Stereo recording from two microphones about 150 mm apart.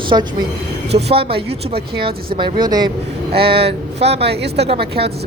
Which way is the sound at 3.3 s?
90° right.